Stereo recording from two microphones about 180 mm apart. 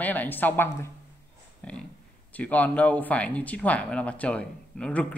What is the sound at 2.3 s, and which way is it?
A man's voice, 10° left (ahead or behind).